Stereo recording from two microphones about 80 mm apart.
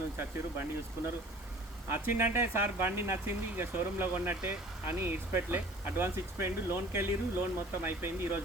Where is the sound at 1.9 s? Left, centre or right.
Right.